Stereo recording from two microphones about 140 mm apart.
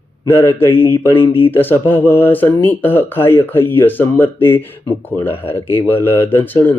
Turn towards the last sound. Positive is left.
turn(degrees=15)  # may be behind; listen again after turning